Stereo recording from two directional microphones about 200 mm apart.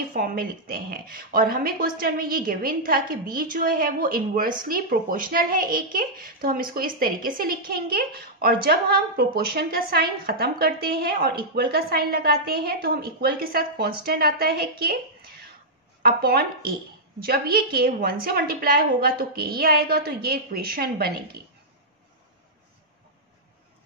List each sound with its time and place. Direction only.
0.1 s a woman's voice: 45° right (ahead or behind)
16.0 s a woman's voice: 50° right (ahead or behind)